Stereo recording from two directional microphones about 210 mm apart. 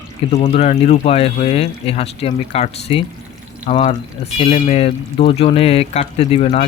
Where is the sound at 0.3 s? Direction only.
30° left (ahead or behind).